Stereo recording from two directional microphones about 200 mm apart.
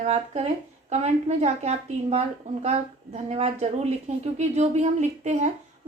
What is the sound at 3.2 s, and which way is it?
A woman's voice, 35° right (ahead or behind).